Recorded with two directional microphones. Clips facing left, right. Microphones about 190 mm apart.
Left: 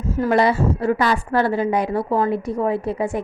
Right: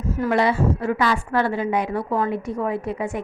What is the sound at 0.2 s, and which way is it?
A woman's voice, 40° left (ahead or behind).